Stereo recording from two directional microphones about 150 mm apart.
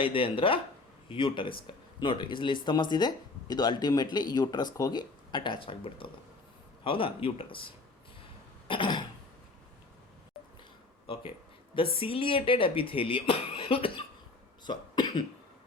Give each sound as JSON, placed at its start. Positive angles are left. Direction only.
{"t": 0.0, "sound": "speech", "side_deg": 35}
{"t": 8.6, "sound": "cough", "side_deg": 35}
{"t": 11.0, "sound": "a sound", "side_deg": 40}
{"t": 11.9, "sound": "speech", "side_deg": 40}
{"t": 14.6, "sound": "cough", "side_deg": 30}